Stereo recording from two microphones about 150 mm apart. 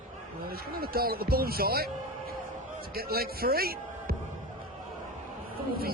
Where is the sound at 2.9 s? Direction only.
90° right.